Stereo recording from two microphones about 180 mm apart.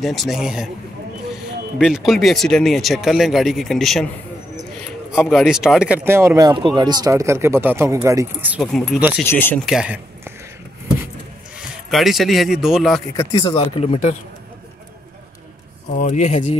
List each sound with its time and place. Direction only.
0.0 s speech: centre (ahead or behind)
5.1 s speech: centre (ahead or behind)
9.3 s speech: 10° left (ahead or behind)
9.7 s speech: 5° right (ahead or behind)
11.5 s speech: centre (ahead or behind)
13.1 s speech: 20° left (ahead or behind); by 14.1 s 35° left (ahead or behind)
15.9 s speech: 45° left (ahead or behind)